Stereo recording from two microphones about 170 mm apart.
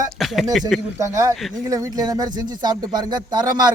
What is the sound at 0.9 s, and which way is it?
Speech, 20° right (ahead or behind).